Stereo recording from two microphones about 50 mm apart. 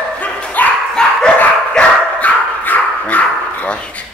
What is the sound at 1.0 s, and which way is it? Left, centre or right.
Dog, centre.